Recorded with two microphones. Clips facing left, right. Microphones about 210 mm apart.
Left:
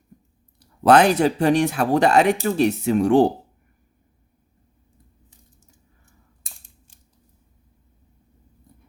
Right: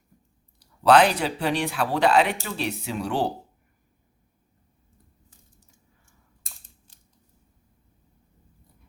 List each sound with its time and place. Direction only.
0.6 s speech: 50° left (ahead or behind)